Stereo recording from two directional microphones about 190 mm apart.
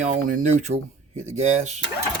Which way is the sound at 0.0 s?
40° right (ahead or behind).